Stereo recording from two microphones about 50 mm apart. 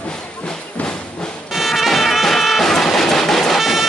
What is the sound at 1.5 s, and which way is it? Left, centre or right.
Music, centre.